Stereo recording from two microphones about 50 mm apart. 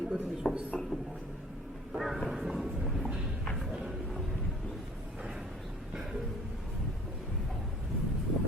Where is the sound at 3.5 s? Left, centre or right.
Centre.